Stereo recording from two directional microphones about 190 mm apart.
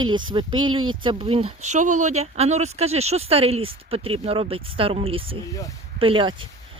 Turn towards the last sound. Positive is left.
turn(degrees=-25)  # may be behind; listen again after turning